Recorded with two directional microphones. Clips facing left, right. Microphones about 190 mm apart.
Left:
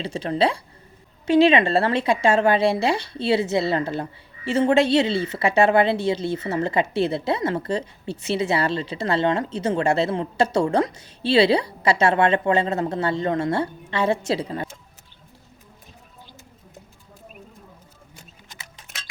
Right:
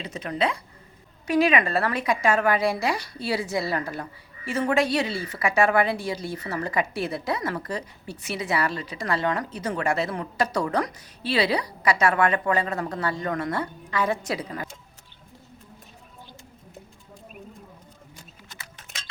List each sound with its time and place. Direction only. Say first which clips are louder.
0.0 s speech: left 5 dB; 30° left (ahead or behind)